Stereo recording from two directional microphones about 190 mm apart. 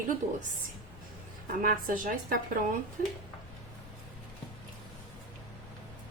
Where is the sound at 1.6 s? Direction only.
45° right (ahead or behind).